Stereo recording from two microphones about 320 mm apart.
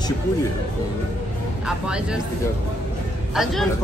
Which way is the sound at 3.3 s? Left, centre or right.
Centre.